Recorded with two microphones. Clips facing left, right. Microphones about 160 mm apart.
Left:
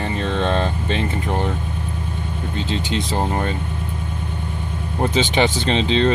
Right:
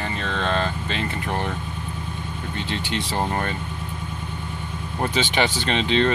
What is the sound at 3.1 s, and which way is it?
Speech, 20° left (ahead or behind).